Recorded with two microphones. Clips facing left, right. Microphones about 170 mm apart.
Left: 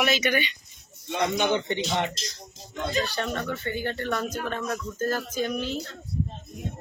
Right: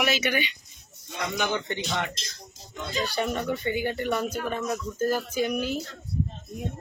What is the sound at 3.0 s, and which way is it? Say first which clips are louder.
Speech: right 2 dB; 10° right (ahead or behind).